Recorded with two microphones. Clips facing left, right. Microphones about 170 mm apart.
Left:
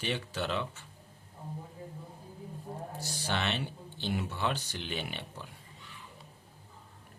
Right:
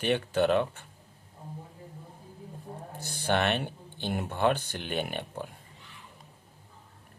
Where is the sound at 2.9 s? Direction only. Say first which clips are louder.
Right 8 dB; 55° right (ahead or behind).